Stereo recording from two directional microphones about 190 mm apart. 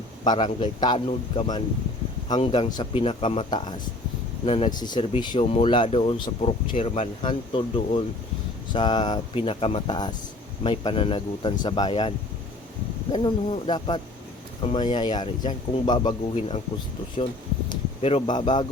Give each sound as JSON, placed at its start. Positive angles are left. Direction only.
{"t": 0.3, "sound": "speech", "side_deg": 25}